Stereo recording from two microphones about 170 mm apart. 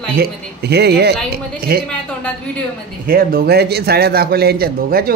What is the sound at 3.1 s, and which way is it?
A man's voice, 60° right (ahead or behind).